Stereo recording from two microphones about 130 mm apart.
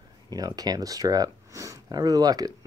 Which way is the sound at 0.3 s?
30° right (ahead or behind).